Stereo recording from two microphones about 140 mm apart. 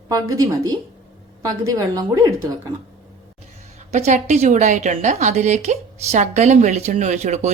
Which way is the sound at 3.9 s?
55° right (ahead or behind).